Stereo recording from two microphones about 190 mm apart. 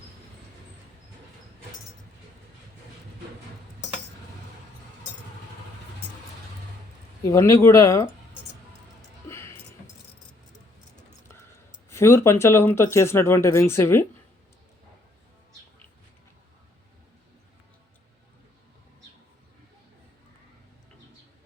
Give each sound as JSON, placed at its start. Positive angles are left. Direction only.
{"t": 7.3, "sound": "speech", "side_deg": 15}
{"t": 9.3, "sound": "a sound", "side_deg": 15}
{"t": 11.9, "sound": "speech", "side_deg": 15}